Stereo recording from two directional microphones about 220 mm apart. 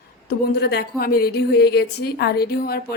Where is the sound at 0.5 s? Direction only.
45° left (ahead or behind).